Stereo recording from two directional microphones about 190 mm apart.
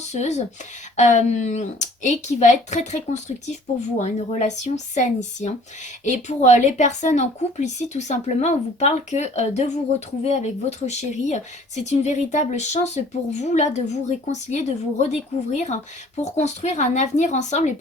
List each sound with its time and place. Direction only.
0.1 s a woman's voice: 35° left (ahead or behind)